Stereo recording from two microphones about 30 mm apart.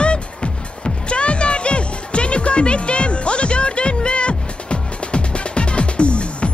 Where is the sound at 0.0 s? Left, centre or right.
Left.